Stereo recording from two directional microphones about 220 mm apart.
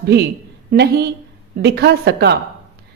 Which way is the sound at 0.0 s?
45° right (ahead or behind).